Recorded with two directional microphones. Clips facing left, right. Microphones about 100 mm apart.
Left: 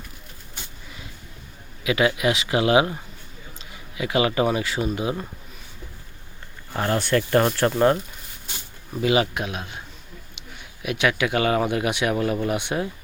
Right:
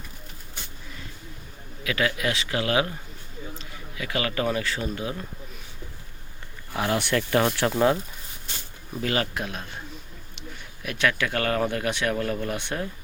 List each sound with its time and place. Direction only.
1.8 s speech: 15° left (ahead or behind)
6.7 s speech: centre (ahead or behind)
9.0 s speech: 10° left (ahead or behind)
10.8 s speech: 10° left (ahead or behind)